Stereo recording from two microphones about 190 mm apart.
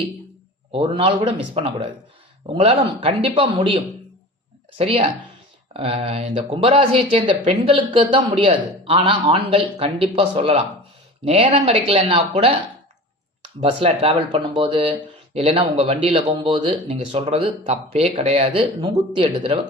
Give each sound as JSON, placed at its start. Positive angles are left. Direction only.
{"t": 0.7, "sound": "speech", "side_deg": -30}